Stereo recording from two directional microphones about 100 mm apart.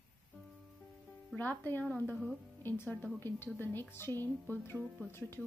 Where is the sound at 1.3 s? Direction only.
20° left (ahead or behind).